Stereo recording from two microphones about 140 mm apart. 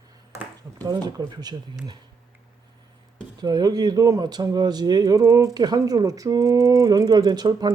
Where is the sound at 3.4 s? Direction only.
30° right (ahead or behind).